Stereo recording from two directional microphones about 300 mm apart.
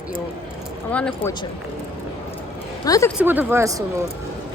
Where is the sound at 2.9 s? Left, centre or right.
Centre.